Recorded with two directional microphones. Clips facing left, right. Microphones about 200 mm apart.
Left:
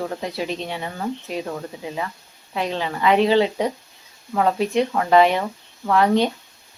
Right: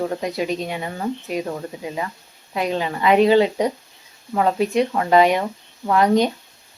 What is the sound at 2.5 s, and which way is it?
Speech, 10° right (ahead or behind).